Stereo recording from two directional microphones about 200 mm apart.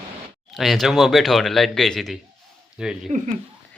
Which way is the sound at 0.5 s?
Centre (ahead or behind).